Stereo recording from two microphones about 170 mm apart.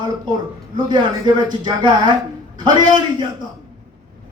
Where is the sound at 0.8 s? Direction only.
25° right (ahead or behind).